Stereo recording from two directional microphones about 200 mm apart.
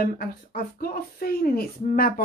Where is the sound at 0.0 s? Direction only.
50° left (ahead or behind).